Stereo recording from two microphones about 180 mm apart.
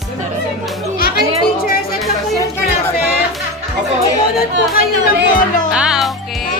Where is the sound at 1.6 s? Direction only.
55° left (ahead or behind).